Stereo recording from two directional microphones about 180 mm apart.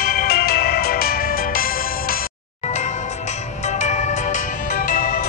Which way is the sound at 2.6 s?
40° left (ahead or behind).